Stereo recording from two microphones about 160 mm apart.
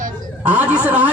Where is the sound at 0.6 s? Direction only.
10° right (ahead or behind).